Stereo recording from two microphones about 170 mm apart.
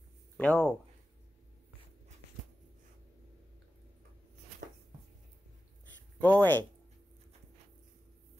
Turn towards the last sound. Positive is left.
turn(degrees=10)  # may be behind; listen again after turning